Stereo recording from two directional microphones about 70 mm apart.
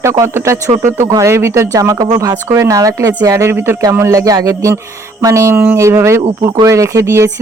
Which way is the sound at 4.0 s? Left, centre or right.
Right.